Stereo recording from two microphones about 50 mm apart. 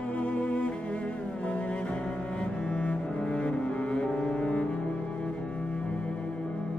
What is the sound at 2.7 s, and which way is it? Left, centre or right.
Cello, left.